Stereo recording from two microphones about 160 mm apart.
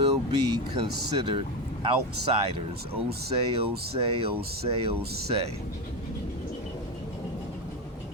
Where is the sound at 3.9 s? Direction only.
35° right (ahead or behind).